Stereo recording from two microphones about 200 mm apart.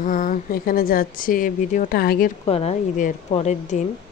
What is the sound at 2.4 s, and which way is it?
Speech, 30° left (ahead or behind).